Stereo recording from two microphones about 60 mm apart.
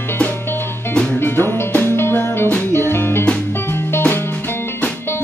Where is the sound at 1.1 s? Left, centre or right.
Left.